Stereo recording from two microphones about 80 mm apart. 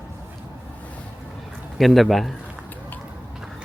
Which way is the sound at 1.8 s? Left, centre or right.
Centre.